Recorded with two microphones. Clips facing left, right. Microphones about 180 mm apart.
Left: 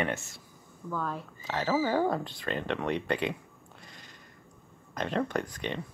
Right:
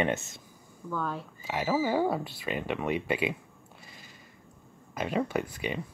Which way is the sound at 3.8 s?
5° right (ahead or behind).